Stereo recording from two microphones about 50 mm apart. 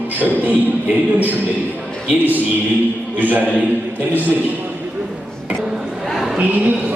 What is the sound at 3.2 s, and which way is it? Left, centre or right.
Speech, right.